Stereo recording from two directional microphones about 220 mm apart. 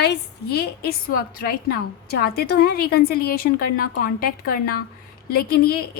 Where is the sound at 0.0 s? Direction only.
45° left (ahead or behind).